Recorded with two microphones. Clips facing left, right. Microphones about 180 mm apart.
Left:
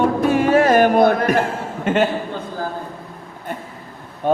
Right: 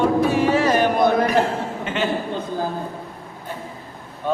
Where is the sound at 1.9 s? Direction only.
50° left (ahead or behind).